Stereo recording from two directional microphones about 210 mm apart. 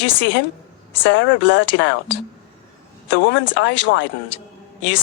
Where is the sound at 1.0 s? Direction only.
60° left (ahead or behind).